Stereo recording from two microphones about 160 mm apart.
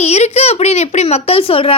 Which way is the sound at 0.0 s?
40° left (ahead or behind).